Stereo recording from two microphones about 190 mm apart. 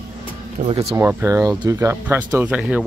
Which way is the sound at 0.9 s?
15° right (ahead or behind).